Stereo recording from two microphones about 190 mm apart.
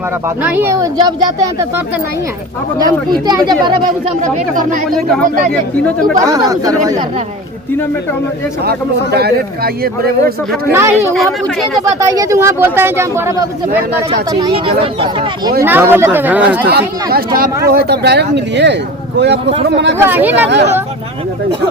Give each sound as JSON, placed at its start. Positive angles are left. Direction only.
{"t": 0.4, "sound": "speech", "side_deg": -10}
{"t": 2.8, "sound": "speech", "side_deg": -20}
{"t": 4.2, "sound": "speech", "side_deg": -45}
{"t": 4.9, "sound": "speech", "side_deg": 0}
{"t": 6.2, "sound": "speech", "side_deg": -20}
{"t": 9.8, "sound": "speech", "side_deg": -55}
{"t": 10.7, "sound": "speech", "side_deg": -15}
{"t": 11.1, "sound": "speech", "side_deg": 0}
{"t": 12.1, "sound": "speech", "side_deg": -15}
{"t": 14.1, "sound": "speech", "side_deg": -25}
{"t": 15.6, "sound": "speech", "side_deg": -10}
{"t": 16.7, "sound": "speech", "side_deg": -55}
{"t": 20.0, "sound": "speech", "side_deg": -10}
{"t": 20.3, "sound": "speech", "side_deg": -65}